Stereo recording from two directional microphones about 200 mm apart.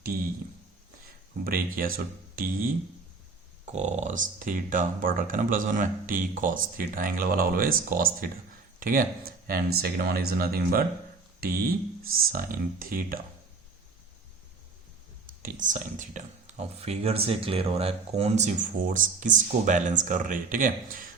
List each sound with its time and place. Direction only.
1.5 s speech: 45° right (ahead or behind)
3.7 s speech: 35° right (ahead or behind)
15.4 s speech: 40° right (ahead or behind)